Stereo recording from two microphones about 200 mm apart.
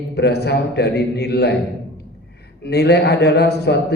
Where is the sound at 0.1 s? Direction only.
55° left (ahead or behind).